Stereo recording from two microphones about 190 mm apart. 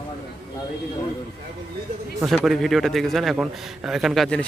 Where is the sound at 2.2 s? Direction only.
Centre (ahead or behind).